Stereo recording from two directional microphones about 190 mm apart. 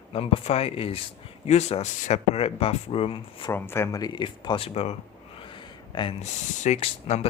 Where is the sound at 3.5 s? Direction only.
10° left (ahead or behind).